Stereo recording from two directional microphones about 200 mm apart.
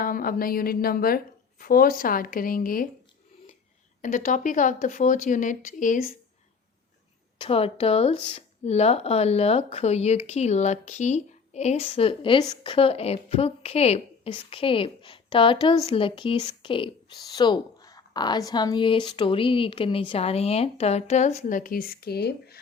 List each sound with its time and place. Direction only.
0.0 s a woman's voice: 45° left (ahead or behind)
4.0 s speech: 40° left (ahead or behind)
7.3 s speech: 30° left (ahead or behind); by 22.6 s 55° left (ahead or behind)